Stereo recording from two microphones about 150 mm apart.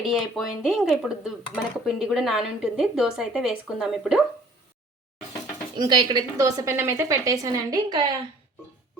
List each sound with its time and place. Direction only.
0.0 s a woman's voice: centre (ahead or behind)
5.7 s a woman's voice: 30° right (ahead or behind)